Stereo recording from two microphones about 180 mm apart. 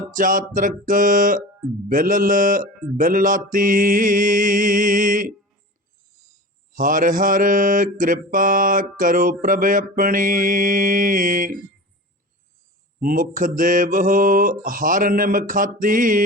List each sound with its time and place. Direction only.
0.1 s mantra: 50° right (ahead or behind)
6.7 s mantra: 50° right (ahead or behind)
13.0 s mantra: 50° right (ahead or behind)